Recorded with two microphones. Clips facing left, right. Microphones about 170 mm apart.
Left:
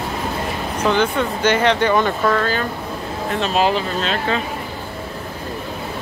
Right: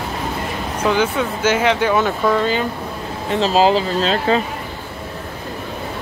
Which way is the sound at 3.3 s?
30° right (ahead or behind).